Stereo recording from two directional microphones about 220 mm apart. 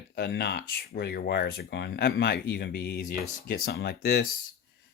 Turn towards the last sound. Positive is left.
turn(degrees=45)  # may be behind; listen again after turning